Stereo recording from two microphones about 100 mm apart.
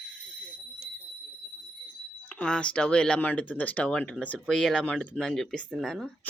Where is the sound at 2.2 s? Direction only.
10° left (ahead or behind).